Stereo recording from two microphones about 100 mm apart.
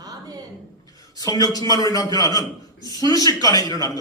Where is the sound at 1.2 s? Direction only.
40° left (ahead or behind).